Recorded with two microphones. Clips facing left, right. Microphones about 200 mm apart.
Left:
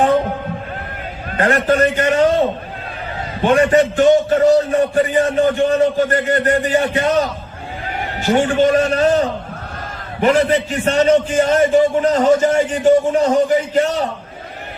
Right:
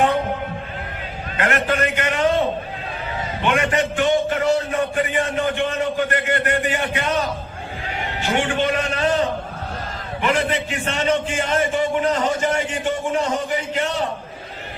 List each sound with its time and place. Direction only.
1.4 s a man's voice: 35° left (ahead or behind)
3.4 s a man's voice: 35° left (ahead or behind)